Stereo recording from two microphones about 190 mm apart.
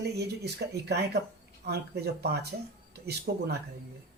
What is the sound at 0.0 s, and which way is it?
Speech, 60° right (ahead or behind).